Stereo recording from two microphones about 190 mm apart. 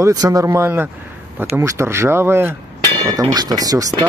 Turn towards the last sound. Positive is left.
turn(degrees=-20)  # may be behind; listen again after turning